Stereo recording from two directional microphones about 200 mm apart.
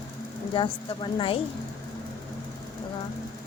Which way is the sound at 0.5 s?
25° left (ahead or behind).